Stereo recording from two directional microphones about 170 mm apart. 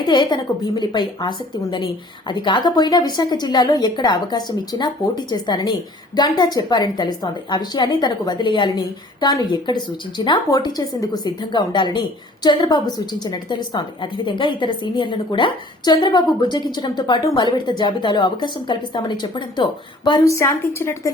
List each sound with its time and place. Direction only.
0.0 s a woman's voice: 25° left (ahead or behind)